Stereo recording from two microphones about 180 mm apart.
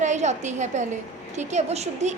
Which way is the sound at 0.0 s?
40° right (ahead or behind).